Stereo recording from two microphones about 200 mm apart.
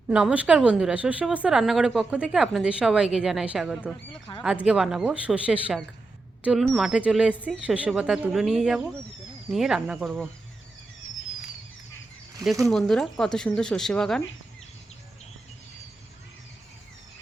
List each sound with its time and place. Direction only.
0.1 s a woman's voice: 5° right (ahead or behind)
4.3 s speech: 25° left (ahead or behind)
4.6 s a woman's voice: 5° right (ahead or behind)
12.6 s a woman's voice: centre (ahead or behind)